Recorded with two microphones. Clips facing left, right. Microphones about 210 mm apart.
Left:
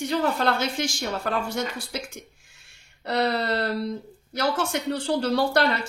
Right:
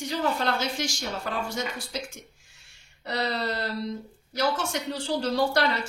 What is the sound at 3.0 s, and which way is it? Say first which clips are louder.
A woman's voice: left 5 dB; 60° left (ahead or behind).